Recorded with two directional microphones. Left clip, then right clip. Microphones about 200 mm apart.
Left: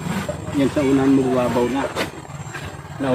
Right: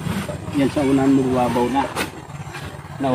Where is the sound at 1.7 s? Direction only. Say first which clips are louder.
Right 2 dB; 45° right (ahead or behind).